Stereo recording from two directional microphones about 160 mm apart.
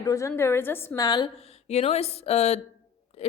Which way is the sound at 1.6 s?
40° left (ahead or behind).